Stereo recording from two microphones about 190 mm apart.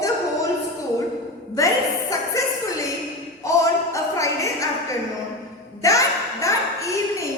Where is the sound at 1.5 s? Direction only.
15° left (ahead or behind).